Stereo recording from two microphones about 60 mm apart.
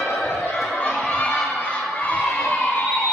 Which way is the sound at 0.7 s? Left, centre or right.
Centre.